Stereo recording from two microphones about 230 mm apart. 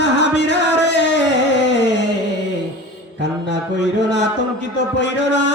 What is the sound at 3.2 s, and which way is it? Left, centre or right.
Music, left.